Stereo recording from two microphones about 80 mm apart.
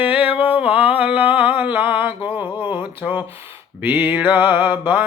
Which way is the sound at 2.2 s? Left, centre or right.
Left.